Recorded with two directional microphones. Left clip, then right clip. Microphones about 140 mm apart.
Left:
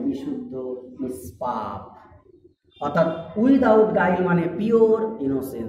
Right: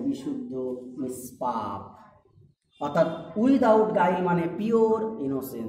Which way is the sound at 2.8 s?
10° left (ahead or behind).